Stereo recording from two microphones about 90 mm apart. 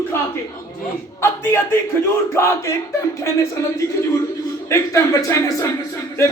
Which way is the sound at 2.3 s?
30° left (ahead or behind).